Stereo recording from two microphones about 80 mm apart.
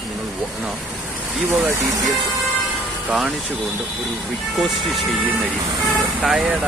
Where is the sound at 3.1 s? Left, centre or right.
Centre.